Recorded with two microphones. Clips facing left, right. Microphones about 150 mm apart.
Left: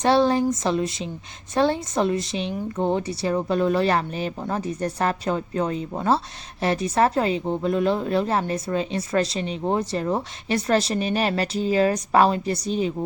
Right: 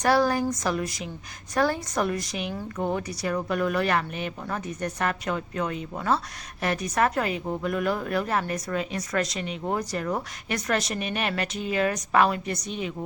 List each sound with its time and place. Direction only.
0.0 s speech: 25° left (ahead or behind)